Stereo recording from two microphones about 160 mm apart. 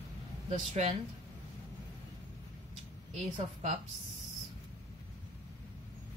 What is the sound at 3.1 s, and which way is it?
Speech, 45° right (ahead or behind).